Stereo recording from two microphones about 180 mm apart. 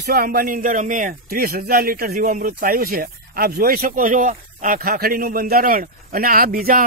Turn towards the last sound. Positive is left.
turn(degrees=-55)  # may be behind; listen again after turning